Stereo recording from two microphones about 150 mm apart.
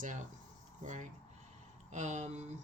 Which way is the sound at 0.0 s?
55° right (ahead or behind).